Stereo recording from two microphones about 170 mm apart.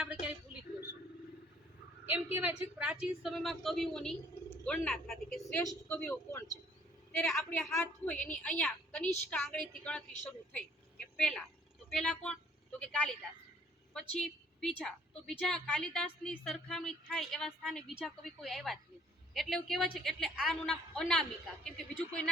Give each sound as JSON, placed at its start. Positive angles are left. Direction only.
{"t": 0.0, "sound": "a sound", "side_deg": -5}
{"t": 2.0, "sound": "a woman's voice", "side_deg": -10}
{"t": 7.2, "sound": "a woman's voice", "side_deg": 0}
{"t": 10.5, "sound": "vehicle", "side_deg": 5}
{"t": 11.9, "sound": "a woman's voice", "side_deg": 5}
{"t": 13.9, "sound": "a woman's voice", "side_deg": 5}